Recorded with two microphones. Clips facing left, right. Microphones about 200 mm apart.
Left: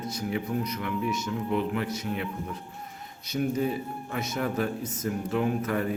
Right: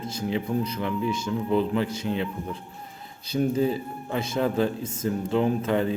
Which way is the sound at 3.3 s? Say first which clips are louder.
Right 4 dB; 30° right (ahead or behind).